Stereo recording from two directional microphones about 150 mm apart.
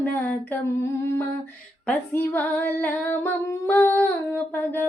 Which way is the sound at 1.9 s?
10° left (ahead or behind).